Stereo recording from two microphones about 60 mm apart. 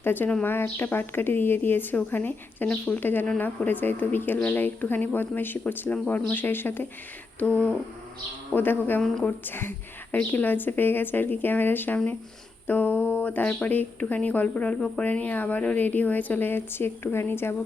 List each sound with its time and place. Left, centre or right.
0.0 s speech: left
7.3 s a woman's voice: left